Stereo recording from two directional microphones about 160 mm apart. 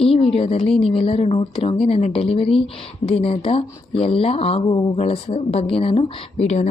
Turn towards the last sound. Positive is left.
turn(degrees=40)  # may be behind; listen again after turning